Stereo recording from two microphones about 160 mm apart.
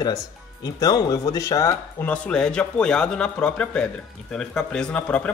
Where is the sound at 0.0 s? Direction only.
25° left (ahead or behind).